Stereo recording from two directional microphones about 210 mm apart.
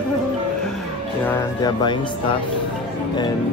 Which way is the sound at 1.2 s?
15° left (ahead or behind).